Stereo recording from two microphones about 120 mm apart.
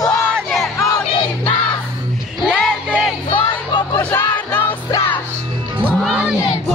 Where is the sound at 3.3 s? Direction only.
40° left (ahead or behind).